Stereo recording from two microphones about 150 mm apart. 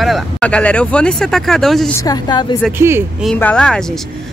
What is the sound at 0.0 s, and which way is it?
Speech, 5° left (ahead or behind).